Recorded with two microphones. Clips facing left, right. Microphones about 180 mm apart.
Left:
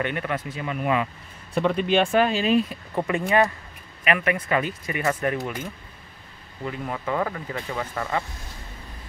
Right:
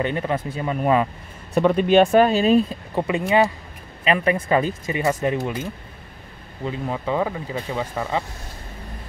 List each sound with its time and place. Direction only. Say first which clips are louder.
0.0 s speech: right 4 dB; 30° right (ahead or behind)
1.5 s speech: right 5 dB; 45° right (ahead or behind)
2.7 s speech: right 2 dB; 20° right (ahead or behind)
4.0 s speech: right 4 dB; 30° right (ahead or behind)
6.6 s speech: right 4 dB; 20° right (ahead or behind)